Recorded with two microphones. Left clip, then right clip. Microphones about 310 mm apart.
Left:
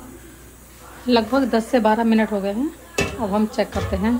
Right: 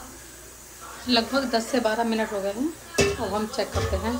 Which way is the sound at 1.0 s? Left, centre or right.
Centre.